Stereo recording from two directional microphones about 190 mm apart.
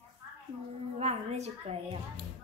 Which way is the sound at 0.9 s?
35° right (ahead or behind).